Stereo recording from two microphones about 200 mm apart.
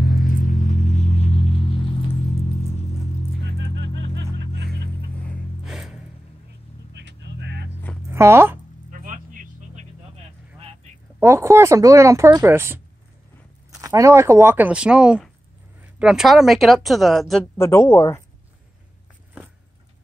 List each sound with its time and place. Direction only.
0.0 s vehicle: 45° left (ahead or behind); by 2.8 s 30° left (ahead or behind)
3.5 s music: 60° right (ahead or behind)
5.2 s music: centre (ahead or behind)
6.9 s a sound: 60° right (ahead or behind)
8.1 s speech: 10° right (ahead or behind)
8.9 s vehicle: 40° right (ahead or behind)
11.1 s speech: 15° right (ahead or behind)
17.6 s speech: 15° left (ahead or behind)